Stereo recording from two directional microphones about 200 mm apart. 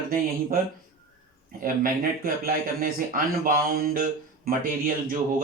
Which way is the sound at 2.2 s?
45° right (ahead or behind).